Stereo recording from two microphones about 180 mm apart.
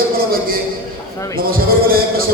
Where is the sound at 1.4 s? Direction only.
55° right (ahead or behind).